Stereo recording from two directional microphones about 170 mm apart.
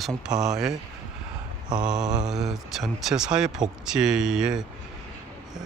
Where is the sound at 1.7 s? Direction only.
5° right (ahead or behind).